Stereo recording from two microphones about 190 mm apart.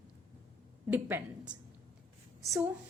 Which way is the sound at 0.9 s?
10° right (ahead or behind).